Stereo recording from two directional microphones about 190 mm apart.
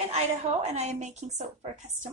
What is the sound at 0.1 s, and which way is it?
A woman's voice, 35° right (ahead or behind).